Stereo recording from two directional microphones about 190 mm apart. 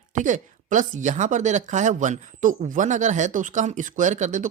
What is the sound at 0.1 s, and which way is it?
Speech, 40° right (ahead or behind).